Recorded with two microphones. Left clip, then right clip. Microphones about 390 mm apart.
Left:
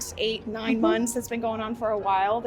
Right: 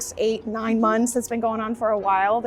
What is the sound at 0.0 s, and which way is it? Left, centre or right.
A woman's voice, right.